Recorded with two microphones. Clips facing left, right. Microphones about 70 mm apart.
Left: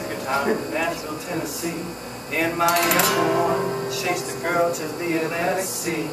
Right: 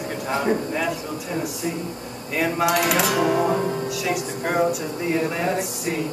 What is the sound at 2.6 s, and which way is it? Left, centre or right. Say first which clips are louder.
Music: left 1 dB; centre.